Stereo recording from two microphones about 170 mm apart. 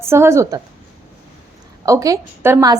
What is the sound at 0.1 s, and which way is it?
Speech, 15° right (ahead or behind).